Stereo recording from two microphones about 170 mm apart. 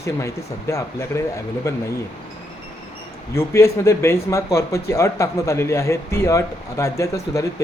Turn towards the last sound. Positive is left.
turn(degrees=20)  # may be behind; listen again after turning